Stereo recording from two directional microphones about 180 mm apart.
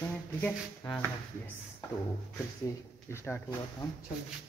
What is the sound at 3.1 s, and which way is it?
Speech, 15° left (ahead or behind).